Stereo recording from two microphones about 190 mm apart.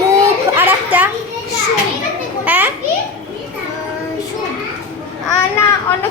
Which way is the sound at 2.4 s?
10° right (ahead or behind).